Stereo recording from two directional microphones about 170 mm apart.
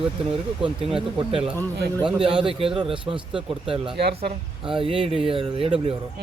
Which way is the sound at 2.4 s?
30° right (ahead or behind).